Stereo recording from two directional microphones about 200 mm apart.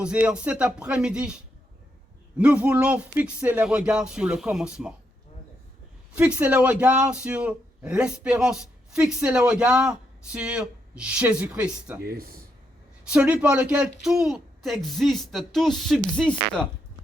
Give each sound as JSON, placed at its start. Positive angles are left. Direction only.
{"t": 0.0, "sound": "speech", "side_deg": -5}
{"t": 2.4, "sound": "speech", "side_deg": -5}
{"t": 6.1, "sound": "speech", "side_deg": -5}
{"t": 12.0, "sound": "speech", "side_deg": -50}
{"t": 13.1, "sound": "speech", "side_deg": -5}